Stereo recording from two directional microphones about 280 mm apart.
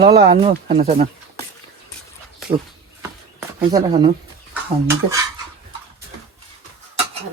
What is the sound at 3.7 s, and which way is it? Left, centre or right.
Speech, centre.